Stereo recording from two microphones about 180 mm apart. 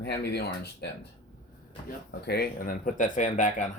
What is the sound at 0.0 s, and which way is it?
Speech, 65° left (ahead or behind).